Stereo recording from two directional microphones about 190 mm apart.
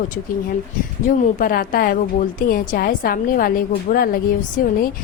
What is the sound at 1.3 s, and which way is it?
A woman's voice, 45° left (ahead or behind).